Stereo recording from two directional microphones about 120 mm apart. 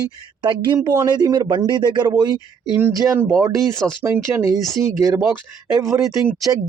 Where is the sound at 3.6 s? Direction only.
5° left (ahead or behind).